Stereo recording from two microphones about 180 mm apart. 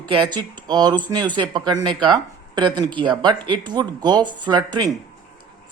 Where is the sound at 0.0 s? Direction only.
25° right (ahead or behind).